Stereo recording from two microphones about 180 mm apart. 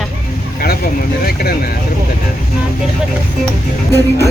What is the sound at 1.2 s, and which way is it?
Speech, 55° left (ahead or behind).